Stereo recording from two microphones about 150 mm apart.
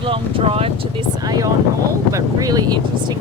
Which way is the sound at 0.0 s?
35° right (ahead or behind).